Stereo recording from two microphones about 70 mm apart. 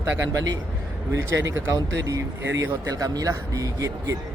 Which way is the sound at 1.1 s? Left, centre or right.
Right.